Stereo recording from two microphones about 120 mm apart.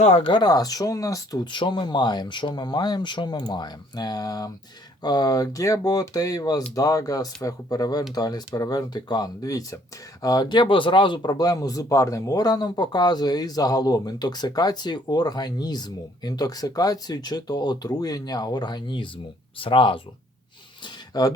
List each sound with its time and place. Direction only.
0.0 s speech: 65° left (ahead or behind)
0.3 s speech: 35° left (ahead or behind)
20.8 s a sound: 30° left (ahead or behind)